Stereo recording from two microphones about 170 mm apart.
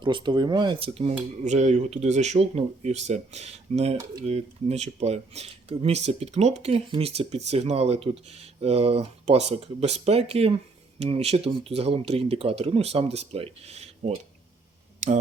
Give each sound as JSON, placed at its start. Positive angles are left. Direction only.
{"t": 0.0, "sound": "speech", "side_deg": -30}